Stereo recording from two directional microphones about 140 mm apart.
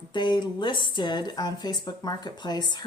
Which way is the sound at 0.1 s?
35° left (ahead or behind).